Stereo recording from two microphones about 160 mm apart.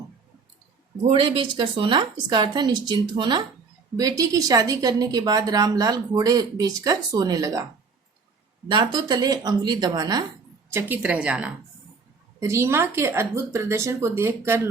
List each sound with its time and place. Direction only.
1.0 s a woman's voice: 35° right (ahead or behind)
8.6 s a woman's voice: 30° right (ahead or behind)
10.7 s speech: 15° right (ahead or behind)